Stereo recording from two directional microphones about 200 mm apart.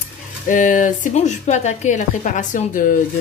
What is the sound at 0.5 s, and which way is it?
Speech, 40° left (ahead or behind).